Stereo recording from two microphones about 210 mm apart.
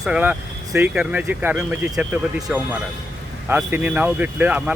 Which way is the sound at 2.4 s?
15° right (ahead or behind).